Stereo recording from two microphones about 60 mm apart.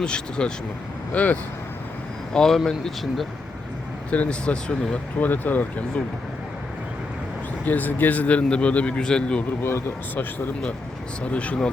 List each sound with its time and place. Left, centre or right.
0.0 s speech: centre
1.1 s a man's voice: left
2.3 s speech: centre
4.1 s speech: left
5.2 s a man's voice: left
7.6 s a man's voice: left; by 9.4 s centre
10.2 s speech: left
11.2 s a man's voice: left